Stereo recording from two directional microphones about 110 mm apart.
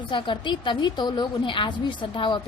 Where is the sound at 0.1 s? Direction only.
45° left (ahead or behind).